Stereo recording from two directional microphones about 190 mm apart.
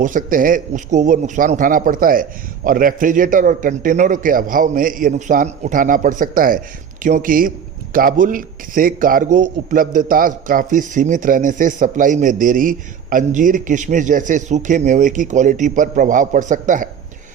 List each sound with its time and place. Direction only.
0.0 s speech: 45° right (ahead or behind)